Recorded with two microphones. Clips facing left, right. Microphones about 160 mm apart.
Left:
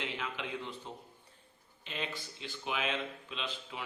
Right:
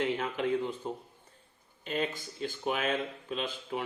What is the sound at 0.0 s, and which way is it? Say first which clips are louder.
A man's voice: right 9 dB; 45° right (ahead or behind).